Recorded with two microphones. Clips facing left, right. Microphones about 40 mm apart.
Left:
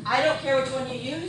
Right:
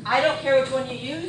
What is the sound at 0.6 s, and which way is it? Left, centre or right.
Speech, right.